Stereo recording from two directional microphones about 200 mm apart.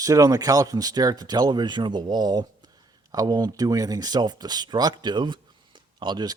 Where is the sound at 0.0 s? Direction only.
15° right (ahead or behind).